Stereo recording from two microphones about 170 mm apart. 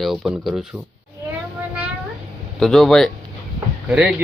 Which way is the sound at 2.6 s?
Centre (ahead or behind).